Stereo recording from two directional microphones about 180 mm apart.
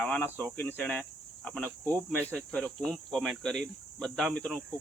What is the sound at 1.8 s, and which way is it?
Speech, 20° right (ahead or behind).